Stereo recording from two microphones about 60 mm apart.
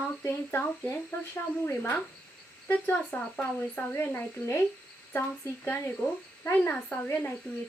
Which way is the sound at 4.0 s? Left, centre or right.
Left.